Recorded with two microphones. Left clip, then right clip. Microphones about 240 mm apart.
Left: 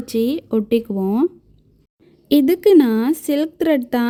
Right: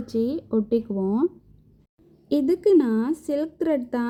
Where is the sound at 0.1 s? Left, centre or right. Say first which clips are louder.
Left 5 dB; left.